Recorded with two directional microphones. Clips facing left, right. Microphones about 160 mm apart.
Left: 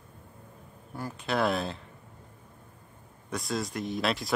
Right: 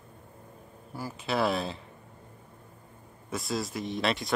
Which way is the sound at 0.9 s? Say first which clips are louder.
Even; 5° right (ahead or behind).